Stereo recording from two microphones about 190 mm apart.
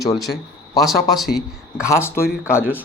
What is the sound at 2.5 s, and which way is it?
Speech, 10° left (ahead or behind).